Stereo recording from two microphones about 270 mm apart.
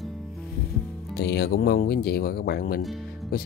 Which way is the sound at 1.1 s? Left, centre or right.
Left.